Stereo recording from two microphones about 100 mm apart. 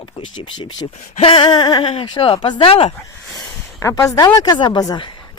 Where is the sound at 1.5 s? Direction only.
45° left (ahead or behind).